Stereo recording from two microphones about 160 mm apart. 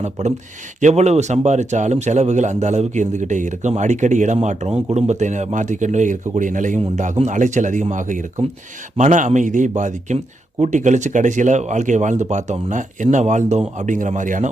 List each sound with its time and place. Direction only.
0.0 s speech: 45° right (ahead or behind)